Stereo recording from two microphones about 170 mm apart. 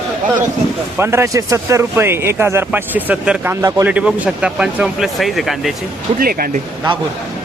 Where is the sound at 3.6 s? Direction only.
20° right (ahead or behind).